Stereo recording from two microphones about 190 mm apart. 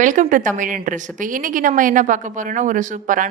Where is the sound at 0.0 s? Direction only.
45° right (ahead or behind).